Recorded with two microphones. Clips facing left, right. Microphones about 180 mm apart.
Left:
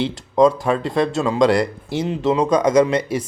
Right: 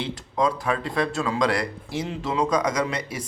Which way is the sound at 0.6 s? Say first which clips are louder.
Left 6 dB; 25° left (ahead or behind).